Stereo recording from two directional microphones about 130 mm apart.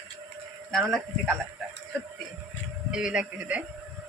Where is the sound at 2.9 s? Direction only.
5° right (ahead or behind).